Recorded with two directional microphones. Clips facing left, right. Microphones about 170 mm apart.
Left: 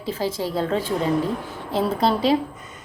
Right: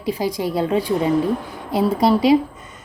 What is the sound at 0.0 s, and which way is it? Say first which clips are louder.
A woman's voice: right 3 dB; 15° right (ahead or behind).